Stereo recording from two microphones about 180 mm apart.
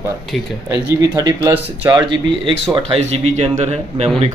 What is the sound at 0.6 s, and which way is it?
A man's voice, 20° right (ahead or behind).